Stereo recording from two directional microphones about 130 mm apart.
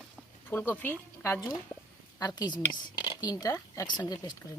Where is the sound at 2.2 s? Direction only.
30° left (ahead or behind).